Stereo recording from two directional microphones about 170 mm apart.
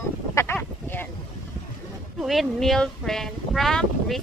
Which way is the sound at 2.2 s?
Centre (ahead or behind).